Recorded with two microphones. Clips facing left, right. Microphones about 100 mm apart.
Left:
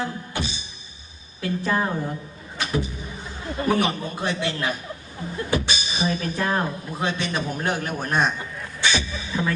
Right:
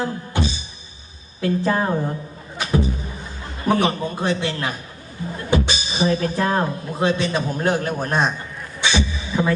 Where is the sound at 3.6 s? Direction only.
35° right (ahead or behind).